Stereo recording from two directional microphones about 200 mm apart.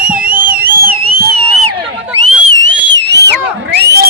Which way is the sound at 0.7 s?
50° right (ahead or behind).